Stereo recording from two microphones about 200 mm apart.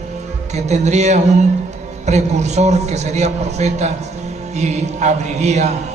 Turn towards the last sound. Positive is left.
turn(degrees=-35)  # may be behind; listen again after turning